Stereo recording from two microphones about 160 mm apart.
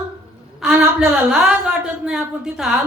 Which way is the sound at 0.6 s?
5° right (ahead or behind).